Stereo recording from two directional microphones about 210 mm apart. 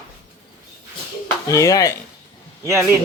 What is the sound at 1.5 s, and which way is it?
Speech, 15° left (ahead or behind).